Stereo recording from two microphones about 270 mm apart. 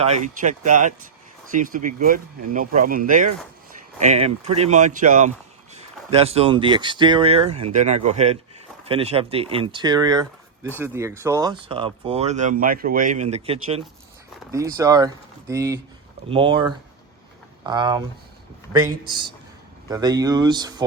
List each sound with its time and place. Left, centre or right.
0.0 s speech: right